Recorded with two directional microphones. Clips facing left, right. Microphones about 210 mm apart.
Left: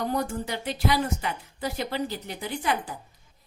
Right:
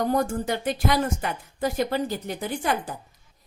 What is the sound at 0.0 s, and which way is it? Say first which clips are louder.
A woman's voice: right 4 dB; 45° right (ahead or behind).